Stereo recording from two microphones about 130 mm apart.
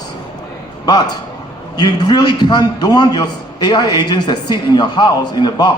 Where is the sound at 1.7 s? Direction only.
35° left (ahead or behind).